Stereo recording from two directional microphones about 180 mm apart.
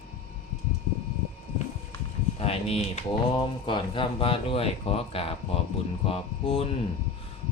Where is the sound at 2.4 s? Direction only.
30° left (ahead or behind).